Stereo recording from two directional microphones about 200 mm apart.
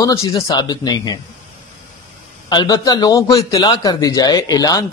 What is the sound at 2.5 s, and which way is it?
Speech, 20° left (ahead or behind).